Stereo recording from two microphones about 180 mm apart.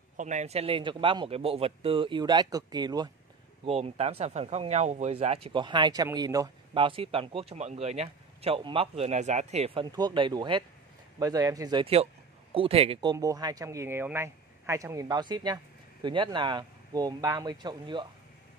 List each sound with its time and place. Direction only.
0.2 s speech: 40° right (ahead or behind); by 3.1 s 20° right (ahead or behind)
3.6 s speech: 35° right (ahead or behind)
9.8 s speech: 25° right (ahead or behind)